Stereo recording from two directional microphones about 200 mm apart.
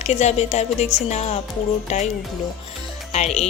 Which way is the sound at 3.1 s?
35° left (ahead or behind).